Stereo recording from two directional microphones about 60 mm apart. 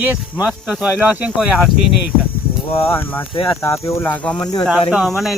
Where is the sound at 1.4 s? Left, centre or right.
Centre.